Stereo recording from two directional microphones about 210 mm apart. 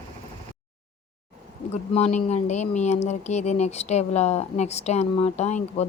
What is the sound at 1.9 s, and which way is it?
Speech, 30° left (ahead or behind).